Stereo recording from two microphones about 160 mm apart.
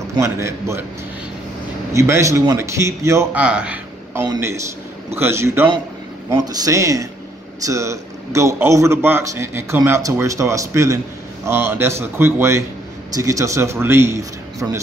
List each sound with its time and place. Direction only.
0.2 s a man's voice: 15° right (ahead or behind)
2.0 s a man's voice: 20° right (ahead or behind)
3.4 s a man's voice: 5° right (ahead or behind)